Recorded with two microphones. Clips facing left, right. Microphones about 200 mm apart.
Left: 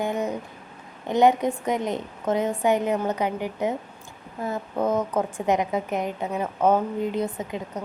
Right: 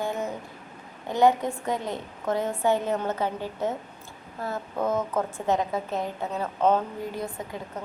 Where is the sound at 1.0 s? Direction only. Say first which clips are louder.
Left 2 dB; 20° left (ahead or behind).